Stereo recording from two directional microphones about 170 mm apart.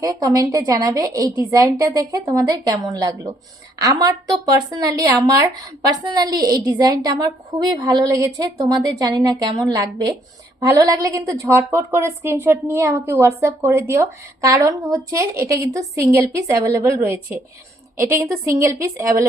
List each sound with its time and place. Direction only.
0.0 s a woman's voice: 20° right (ahead or behind)